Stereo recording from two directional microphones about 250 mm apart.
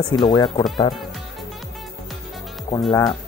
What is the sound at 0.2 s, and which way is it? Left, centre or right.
Speech, centre.